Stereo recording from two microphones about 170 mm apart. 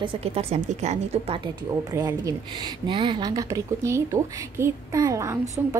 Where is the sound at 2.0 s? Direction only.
20° right (ahead or behind).